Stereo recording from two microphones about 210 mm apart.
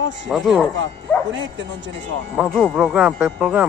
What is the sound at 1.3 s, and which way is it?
Speech, 60° right (ahead or behind).